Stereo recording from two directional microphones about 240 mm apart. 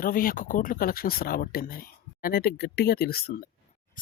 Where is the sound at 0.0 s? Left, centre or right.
Left.